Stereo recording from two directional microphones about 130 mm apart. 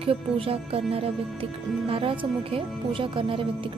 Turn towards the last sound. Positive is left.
turn(degrees=-45)  # may be behind; listen again after turning